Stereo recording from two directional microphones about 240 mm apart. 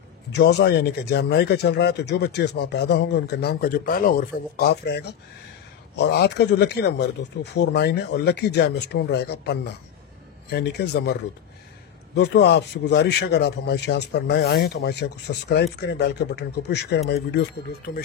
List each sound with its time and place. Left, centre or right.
0.3 s a man's voice: left
12.2 s a man's voice: left